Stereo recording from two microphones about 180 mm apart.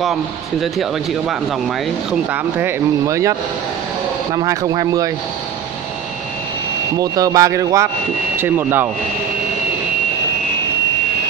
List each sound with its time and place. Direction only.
0.0 s speech: centre (ahead or behind)
2.3 s speech: 10° right (ahead or behind)
7.0 s speech: 20° right (ahead or behind)